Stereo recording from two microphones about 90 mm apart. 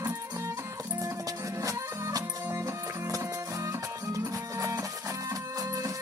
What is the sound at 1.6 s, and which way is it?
Music, 35° right (ahead or behind).